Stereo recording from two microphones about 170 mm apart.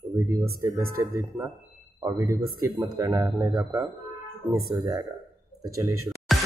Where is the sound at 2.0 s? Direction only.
20° right (ahead or behind).